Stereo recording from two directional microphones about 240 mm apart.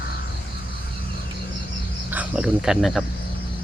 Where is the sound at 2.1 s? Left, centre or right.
Centre.